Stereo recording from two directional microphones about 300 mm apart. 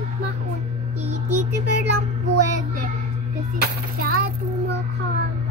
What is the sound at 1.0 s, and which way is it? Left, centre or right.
Child singing, right.